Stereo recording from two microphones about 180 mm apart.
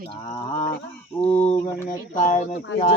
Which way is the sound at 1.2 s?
40° left (ahead or behind).